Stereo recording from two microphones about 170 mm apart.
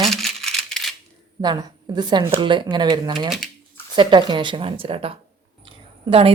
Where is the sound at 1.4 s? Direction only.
25° right (ahead or behind).